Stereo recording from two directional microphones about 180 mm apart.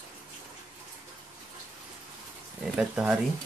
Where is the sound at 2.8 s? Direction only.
5° right (ahead or behind).